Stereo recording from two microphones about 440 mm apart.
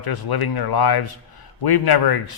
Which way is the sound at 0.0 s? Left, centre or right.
Left.